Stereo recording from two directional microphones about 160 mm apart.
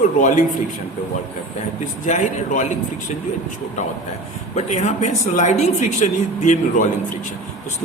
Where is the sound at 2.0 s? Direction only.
50° left (ahead or behind).